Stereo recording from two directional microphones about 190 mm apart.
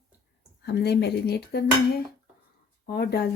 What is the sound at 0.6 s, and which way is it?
Speech, 60° left (ahead or behind).